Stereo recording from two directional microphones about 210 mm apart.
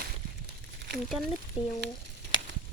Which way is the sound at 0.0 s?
50° right (ahead or behind).